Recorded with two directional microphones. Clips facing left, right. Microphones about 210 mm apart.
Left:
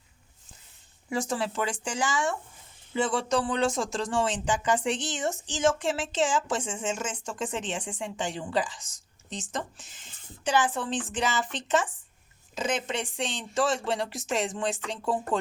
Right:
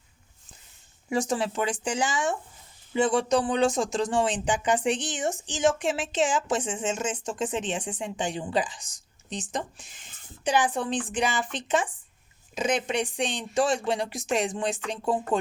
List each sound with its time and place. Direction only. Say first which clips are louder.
1.1 s speech: right 3 dB; 20° right (ahead or behind)